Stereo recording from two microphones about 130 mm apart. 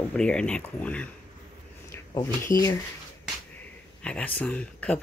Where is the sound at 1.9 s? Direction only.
20° left (ahead or behind).